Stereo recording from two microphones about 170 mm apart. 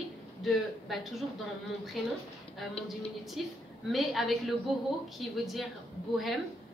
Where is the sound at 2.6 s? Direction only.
Centre (ahead or behind).